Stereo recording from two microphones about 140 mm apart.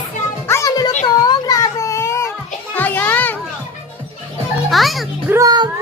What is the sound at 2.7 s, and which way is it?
Children playing, 10° left (ahead or behind).